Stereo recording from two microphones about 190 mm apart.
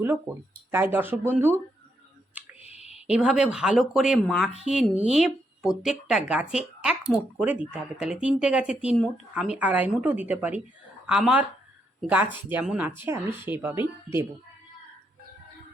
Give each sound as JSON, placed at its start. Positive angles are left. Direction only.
{"t": 0.7, "sound": "a woman's voice", "side_deg": -10}
{"t": 2.6, "sound": "clicking", "side_deg": 35}
{"t": 3.1, "sound": "a woman's voice", "side_deg": -5}